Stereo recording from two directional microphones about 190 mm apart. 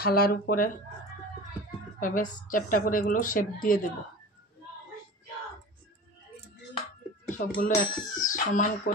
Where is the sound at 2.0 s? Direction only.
45° left (ahead or behind).